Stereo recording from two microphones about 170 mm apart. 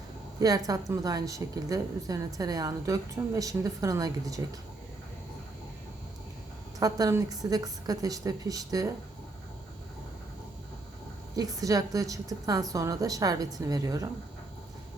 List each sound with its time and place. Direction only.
0.3 s a woman's voice: 20° right (ahead or behind)
6.7 s a woman's voice: 20° right (ahead or behind)
11.3 s a woman's voice: 20° right (ahead or behind)